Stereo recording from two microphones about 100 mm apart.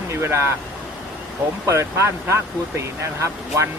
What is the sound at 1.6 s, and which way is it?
Speech, 30° right (ahead or behind).